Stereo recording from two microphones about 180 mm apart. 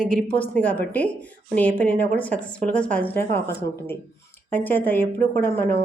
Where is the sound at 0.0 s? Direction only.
5° left (ahead or behind).